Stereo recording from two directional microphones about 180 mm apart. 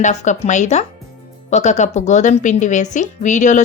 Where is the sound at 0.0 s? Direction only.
40° left (ahead or behind).